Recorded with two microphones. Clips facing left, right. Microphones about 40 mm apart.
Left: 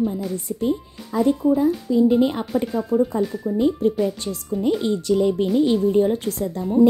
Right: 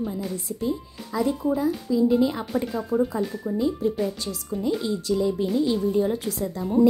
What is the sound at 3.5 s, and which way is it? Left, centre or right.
Speech, left.